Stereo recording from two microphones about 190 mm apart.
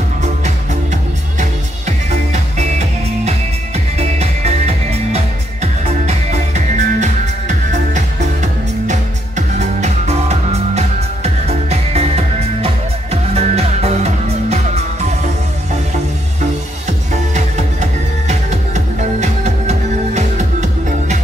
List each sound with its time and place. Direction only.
1.4 s music: 35° right (ahead or behind)
17.1 s music: 35° right (ahead or behind)
18.9 s music: 35° right (ahead or behind)